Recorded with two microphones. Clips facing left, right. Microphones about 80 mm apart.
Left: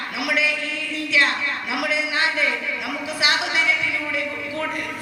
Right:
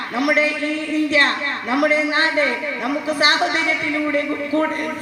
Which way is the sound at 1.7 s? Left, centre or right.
Right.